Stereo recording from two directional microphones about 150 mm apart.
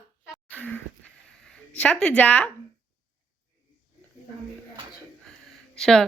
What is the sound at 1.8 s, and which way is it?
Speech, 5° left (ahead or behind).